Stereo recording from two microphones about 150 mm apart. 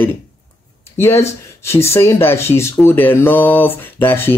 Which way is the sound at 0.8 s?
15° left (ahead or behind).